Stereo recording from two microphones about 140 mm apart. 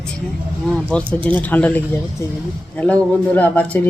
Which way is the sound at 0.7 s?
5° left (ahead or behind).